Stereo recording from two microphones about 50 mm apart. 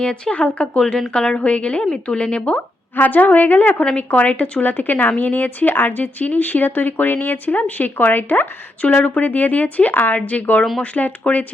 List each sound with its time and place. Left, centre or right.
0.0 s speech: centre
2.9 s speech: left
9.0 s speech: left